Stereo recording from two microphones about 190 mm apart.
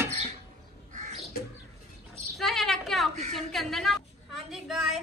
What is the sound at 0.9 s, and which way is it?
Crow, 40° right (ahead or behind).